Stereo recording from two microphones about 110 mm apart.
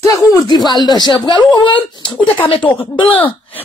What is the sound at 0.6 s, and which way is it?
A woman's voice, 40° left (ahead or behind).